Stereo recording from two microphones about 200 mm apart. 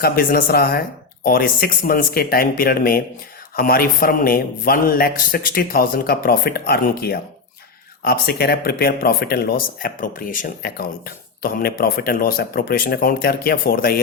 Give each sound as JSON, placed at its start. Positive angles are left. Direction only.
{"t": 0.0, "sound": "speech", "side_deg": 45}